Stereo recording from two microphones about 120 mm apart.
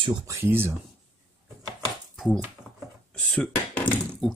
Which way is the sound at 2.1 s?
Centre (ahead or behind).